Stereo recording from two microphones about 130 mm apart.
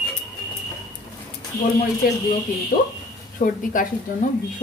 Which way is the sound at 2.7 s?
90° left.